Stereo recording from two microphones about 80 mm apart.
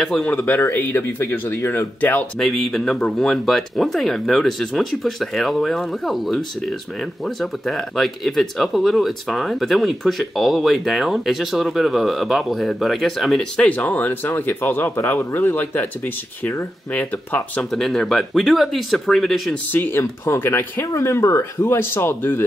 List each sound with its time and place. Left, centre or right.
0.0 s speech: centre
0.3 s speech: centre
2.3 s speech: centre
13.6 s speech: centre
17.6 s speech: centre
19.7 s speech: left
20.9 s speech: left